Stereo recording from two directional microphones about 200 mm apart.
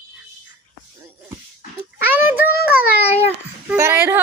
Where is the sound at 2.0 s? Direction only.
10° right (ahead or behind).